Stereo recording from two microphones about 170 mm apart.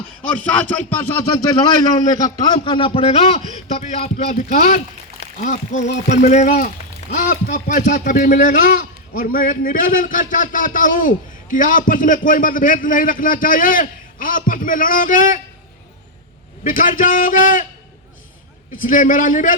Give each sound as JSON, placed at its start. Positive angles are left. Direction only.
{"t": 0.9, "sound": "a sound", "side_deg": 10}
{"t": 1.5, "sound": "a man's voice", "side_deg": 20}
{"t": 16.6, "sound": "speech", "side_deg": 55}
{"t": 18.8, "sound": "speech", "side_deg": 50}